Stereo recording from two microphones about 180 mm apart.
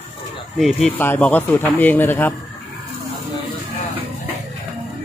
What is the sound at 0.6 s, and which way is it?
Speech, centre (ahead or behind).